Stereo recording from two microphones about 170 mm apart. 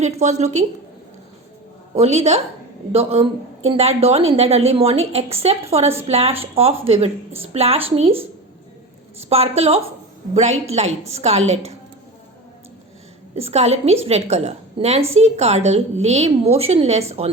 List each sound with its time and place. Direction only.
0.0 s a woman's voice: 40° right (ahead or behind)
2.0 s a woman's voice: 40° right (ahead or behind)
9.3 s a woman's voice: 35° right (ahead or behind)
13.3 s a woman's voice: 40° right (ahead or behind)